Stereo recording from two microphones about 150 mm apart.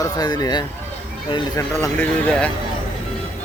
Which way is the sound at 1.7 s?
20° left (ahead or behind).